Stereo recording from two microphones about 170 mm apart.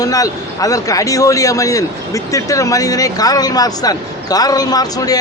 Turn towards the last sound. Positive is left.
turn(degrees=20)  # may be behind; listen again after turning